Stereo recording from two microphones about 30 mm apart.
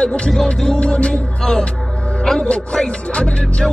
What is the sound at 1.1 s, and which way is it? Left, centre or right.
Music, left.